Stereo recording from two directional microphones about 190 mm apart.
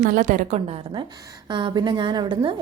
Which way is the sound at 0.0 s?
45° right (ahead or behind).